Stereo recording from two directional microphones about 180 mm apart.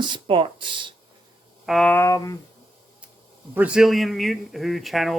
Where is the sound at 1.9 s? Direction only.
15° left (ahead or behind).